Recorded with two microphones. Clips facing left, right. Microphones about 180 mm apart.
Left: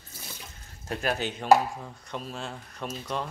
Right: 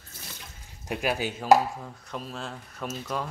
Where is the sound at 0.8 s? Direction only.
10° right (ahead or behind).